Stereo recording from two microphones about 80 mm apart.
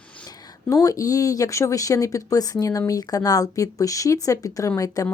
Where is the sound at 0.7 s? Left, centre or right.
Left.